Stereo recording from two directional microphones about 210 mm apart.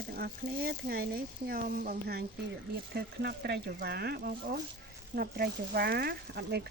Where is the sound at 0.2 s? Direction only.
45° right (ahead or behind).